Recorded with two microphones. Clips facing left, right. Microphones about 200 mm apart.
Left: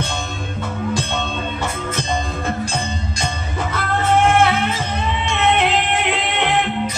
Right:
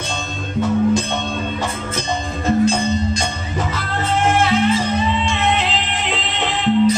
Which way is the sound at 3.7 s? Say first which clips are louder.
Left 7 dB; 55° left (ahead or behind).